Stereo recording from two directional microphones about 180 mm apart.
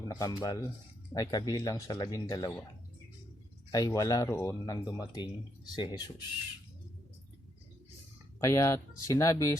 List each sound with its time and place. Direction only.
0.1 s speech: 20° left (ahead or behind)
3.7 s speech: 20° left (ahead or behind)
8.4 s speech: 15° left (ahead or behind)